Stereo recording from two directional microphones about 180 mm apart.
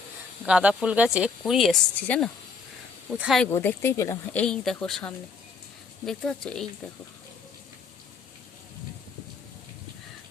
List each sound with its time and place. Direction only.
0.4 s speech: 5° right (ahead or behind)
3.1 s speech: 5° right (ahead or behind)
3.5 s speech: 10° left (ahead or behind)